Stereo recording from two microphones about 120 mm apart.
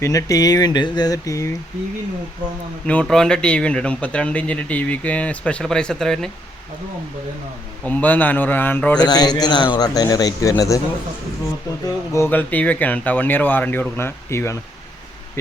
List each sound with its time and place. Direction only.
0.0 s a man's voice: 25° left (ahead or behind)
2.8 s speech: 10° left (ahead or behind)
7.9 s speech: 15° left (ahead or behind)
9.0 s a man's voice: 35° left (ahead or behind)
12.1 s speech: 20° left (ahead or behind)